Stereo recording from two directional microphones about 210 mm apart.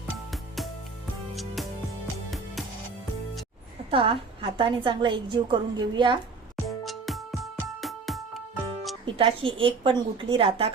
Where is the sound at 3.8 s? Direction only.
25° right (ahead or behind).